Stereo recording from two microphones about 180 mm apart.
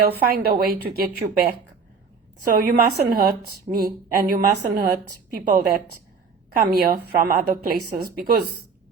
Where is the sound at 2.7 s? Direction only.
60° right (ahead or behind).